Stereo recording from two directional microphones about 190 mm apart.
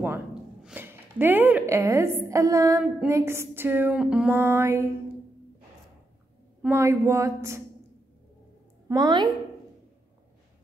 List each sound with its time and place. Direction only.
0.0 s speech: 5° right (ahead or behind)
2.8 s music: 10° right (ahead or behind)
6.6 s music: 15° right (ahead or behind)
8.8 s a woman's voice: 20° right (ahead or behind)